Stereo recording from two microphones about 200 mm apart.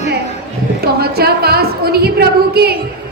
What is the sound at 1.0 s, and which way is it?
A woman's voice, 50° right (ahead or behind).